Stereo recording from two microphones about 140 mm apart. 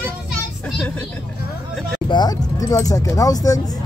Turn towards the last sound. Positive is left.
turn(degrees=25)  # may be behind; listen again after turning